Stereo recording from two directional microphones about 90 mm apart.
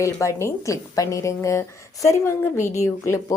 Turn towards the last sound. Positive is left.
turn(degrees=35)  # may be behind; listen again after turning